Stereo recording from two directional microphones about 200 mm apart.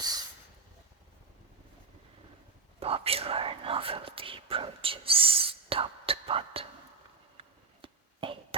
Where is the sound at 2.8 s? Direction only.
30° right (ahead or behind).